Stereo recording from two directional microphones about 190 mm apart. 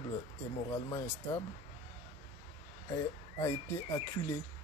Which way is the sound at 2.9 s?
15° left (ahead or behind).